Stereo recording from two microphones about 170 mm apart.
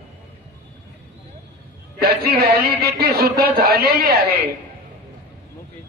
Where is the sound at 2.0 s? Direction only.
65° right (ahead or behind).